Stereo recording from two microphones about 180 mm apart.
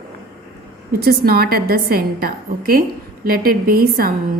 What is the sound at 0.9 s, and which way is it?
A woman's voice, 60° right (ahead or behind).